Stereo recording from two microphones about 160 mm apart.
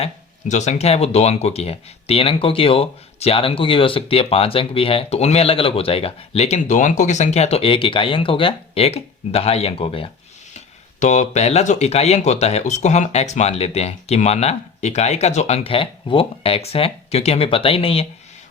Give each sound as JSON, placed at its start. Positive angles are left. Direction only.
{"t": 0.0, "sound": "speech", "side_deg": 45}
{"t": 11.0, "sound": "speech", "side_deg": 45}